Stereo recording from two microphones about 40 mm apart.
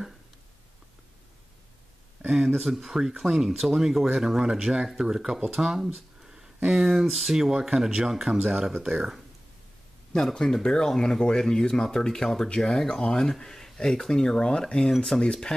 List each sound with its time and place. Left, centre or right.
2.5 s speech: centre
6.2 s a sound: centre
6.7 s speech: centre
8.7 s speech: right
10.1 s speech: centre